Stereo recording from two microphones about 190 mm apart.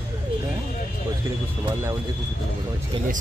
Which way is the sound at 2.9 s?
25° right (ahead or behind).